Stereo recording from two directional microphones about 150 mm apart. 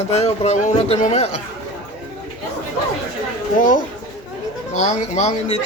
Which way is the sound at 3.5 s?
60° left (ahead or behind).